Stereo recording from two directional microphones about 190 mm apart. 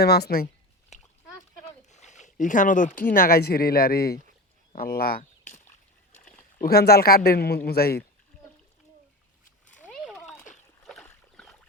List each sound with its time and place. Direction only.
0.0 s speech: 55° left (ahead or behind)
1.9 s zipper: 40° left (ahead or behind)
3.2 s speech: 50° left (ahead or behind)
4.7 s a sound: 50° left (ahead or behind)
6.6 s speech: 55° left (ahead or behind)
9.8 s a sound: 5° left (ahead or behind)
10.8 s boat: 5° left (ahead or behind)